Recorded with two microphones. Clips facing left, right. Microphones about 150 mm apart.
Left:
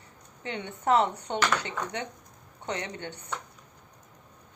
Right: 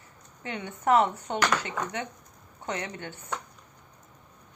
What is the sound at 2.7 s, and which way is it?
Speech, 30° left (ahead or behind).